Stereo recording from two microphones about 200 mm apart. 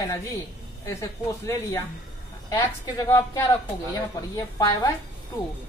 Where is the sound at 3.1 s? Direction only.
15° left (ahead or behind).